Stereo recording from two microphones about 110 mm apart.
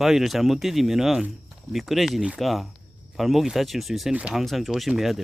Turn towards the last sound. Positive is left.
turn(degrees=0)  # may be behind; listen again after turning